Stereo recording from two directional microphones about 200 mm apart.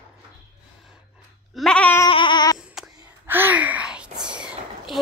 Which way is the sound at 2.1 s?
25° left (ahead or behind).